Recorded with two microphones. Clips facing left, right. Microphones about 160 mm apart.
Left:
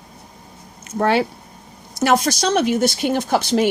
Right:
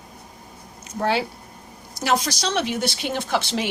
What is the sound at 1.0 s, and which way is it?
Speech, 55° left (ahead or behind).